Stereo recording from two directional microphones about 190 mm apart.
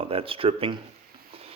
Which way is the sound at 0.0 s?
30° right (ahead or behind).